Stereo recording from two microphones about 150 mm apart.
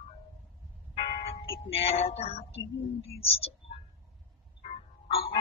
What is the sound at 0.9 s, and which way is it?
Church bell, 40° left (ahead or behind).